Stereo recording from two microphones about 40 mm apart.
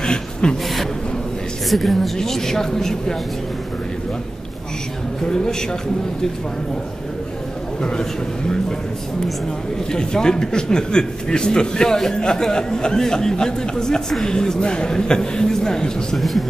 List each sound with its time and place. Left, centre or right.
0.0 s speech: centre
1.7 s a woman's voice: centre
5.2 s a man's voice: centre
7.8 s a man's voice: centre
9.8 s a man's voice: centre
16.2 s a woman's voice: centre